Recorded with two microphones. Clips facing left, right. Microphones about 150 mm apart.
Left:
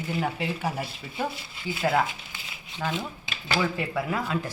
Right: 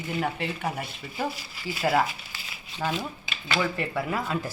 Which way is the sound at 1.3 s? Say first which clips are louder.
Left 1 dB; 25° left (ahead or behind).